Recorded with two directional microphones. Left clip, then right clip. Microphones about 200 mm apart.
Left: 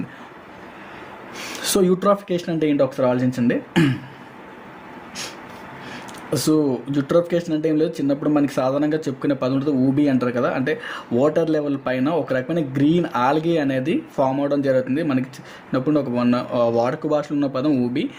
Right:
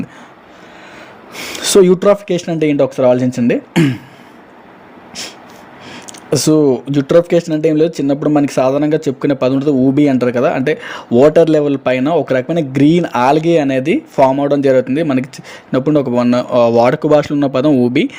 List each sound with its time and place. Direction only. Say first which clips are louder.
1.4 s speech: right 10 dB; 40° right (ahead or behind)
5.9 s speech: right 9 dB; 40° right (ahead or behind)